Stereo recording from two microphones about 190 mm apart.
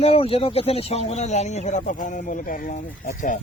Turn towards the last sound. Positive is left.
turn(degrees=45)  # may be behind; listen again after turning